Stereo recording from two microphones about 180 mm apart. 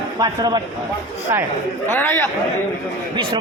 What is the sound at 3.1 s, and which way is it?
Speech, 30° right (ahead or behind).